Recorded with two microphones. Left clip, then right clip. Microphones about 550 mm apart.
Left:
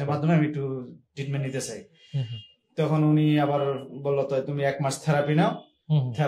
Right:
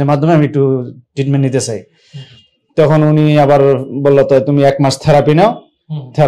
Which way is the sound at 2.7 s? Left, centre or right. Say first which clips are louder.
Right 14 dB; right.